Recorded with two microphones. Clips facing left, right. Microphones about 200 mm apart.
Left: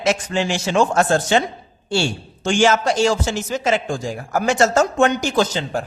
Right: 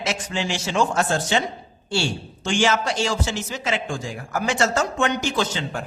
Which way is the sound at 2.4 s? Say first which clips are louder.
Left 5 dB; 45° left (ahead or behind).